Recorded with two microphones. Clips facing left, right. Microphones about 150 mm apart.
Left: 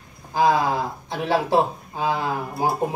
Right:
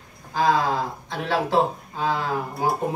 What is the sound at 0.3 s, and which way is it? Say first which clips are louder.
Speech: left 2 dB; 15° left (ahead or behind).